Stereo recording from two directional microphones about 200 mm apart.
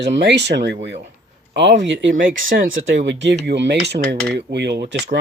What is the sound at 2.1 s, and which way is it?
Speech, 40° right (ahead or behind).